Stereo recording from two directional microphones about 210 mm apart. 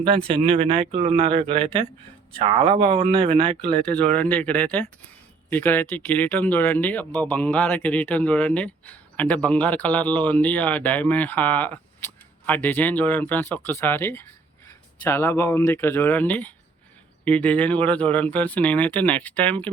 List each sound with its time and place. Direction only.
0.3 s speech: 25° right (ahead or behind)
3.8 s speech: 5° left (ahead or behind)